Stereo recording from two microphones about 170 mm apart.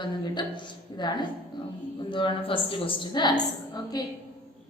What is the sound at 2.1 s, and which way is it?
A woman's voice, 30° left (ahead or behind).